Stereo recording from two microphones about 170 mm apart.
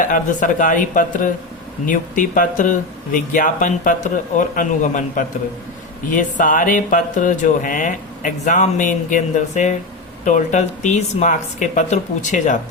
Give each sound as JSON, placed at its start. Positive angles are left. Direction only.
{"t": 0.0, "sound": "speech", "side_deg": 50}